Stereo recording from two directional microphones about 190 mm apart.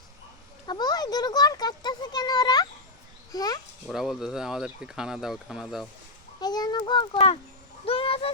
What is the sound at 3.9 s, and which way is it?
Speech, centre (ahead or behind).